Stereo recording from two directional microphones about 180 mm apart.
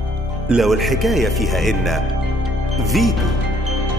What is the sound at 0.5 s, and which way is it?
Speech, centre (ahead or behind).